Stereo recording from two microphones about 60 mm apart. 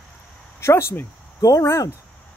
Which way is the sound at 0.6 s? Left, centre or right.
Left.